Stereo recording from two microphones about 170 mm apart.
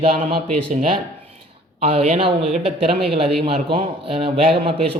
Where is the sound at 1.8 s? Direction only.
35° right (ahead or behind).